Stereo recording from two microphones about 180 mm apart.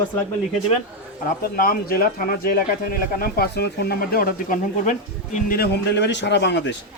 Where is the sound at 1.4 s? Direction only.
55° left (ahead or behind).